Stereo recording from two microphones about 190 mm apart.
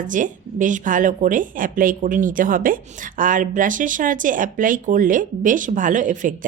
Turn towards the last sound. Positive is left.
turn(degrees=-40)  # may be behind; listen again after turning